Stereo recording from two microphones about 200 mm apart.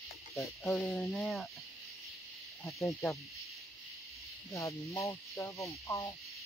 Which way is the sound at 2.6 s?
15° left (ahead or behind).